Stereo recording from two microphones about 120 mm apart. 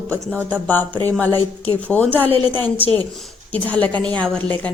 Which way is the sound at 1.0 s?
15° left (ahead or behind).